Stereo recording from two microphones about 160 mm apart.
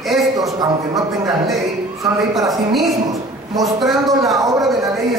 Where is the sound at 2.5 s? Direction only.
Centre (ahead or behind).